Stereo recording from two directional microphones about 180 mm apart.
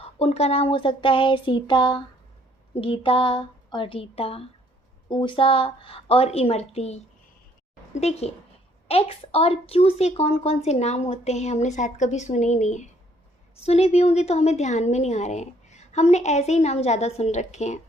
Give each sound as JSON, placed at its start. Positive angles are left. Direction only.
{"t": 0.0, "sound": "a woman's voice", "side_deg": 35}